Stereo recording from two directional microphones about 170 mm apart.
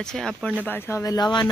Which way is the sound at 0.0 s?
5° left (ahead or behind).